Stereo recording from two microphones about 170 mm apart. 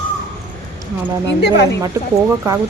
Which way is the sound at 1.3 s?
85° left.